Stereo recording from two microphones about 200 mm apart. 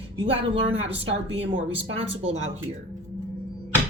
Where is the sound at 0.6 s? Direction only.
30° right (ahead or behind).